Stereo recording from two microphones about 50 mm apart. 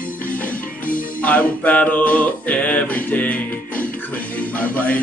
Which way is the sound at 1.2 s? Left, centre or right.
Left.